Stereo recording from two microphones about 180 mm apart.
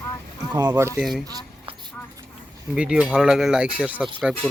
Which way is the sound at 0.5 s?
15° right (ahead or behind).